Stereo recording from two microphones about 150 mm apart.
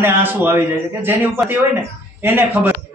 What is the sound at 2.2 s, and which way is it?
Speech, 15° right (ahead or behind).